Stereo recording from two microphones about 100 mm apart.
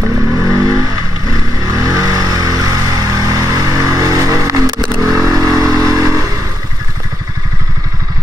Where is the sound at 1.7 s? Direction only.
35° right (ahead or behind).